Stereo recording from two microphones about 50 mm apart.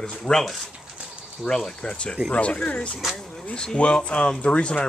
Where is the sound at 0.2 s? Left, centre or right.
Centre.